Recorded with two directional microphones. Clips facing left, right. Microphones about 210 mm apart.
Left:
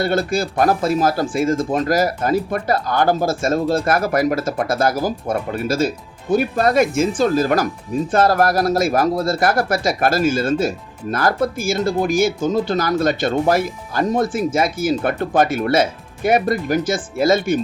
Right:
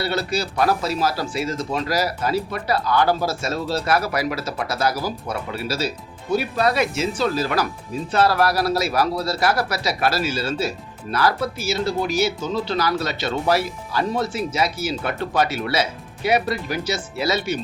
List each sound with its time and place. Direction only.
0.0 s speech: 50° left (ahead or behind)